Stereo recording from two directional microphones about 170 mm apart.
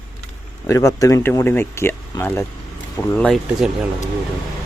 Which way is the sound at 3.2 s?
Centre (ahead or behind).